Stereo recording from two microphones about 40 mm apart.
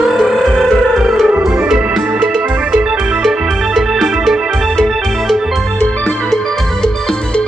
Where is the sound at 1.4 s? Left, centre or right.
Centre.